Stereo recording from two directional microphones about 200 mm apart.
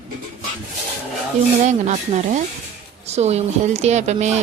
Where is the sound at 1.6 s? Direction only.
35° right (ahead or behind).